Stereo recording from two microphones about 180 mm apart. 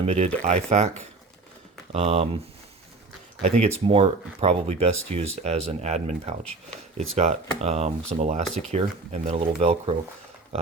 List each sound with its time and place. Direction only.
0.0 s speech: 35° right (ahead or behind)
3.4 s speech: 35° right (ahead or behind)